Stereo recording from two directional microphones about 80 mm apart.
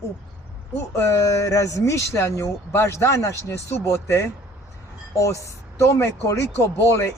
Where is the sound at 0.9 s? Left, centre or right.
Left.